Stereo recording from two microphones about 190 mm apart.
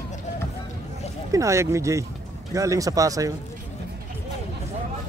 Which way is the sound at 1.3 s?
15° right (ahead or behind).